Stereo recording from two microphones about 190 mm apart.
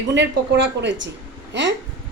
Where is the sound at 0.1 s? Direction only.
70° right (ahead or behind).